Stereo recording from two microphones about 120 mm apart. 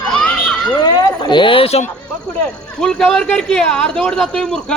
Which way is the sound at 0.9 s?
40° left (ahead or behind).